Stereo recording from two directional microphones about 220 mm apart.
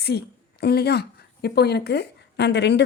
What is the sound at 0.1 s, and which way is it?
Speech, 45° left (ahead or behind).